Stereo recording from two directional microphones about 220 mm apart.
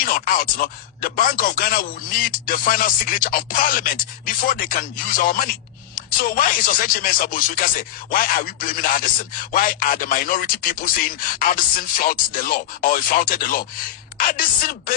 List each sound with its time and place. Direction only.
0.0 s speech: 40° left (ahead or behind)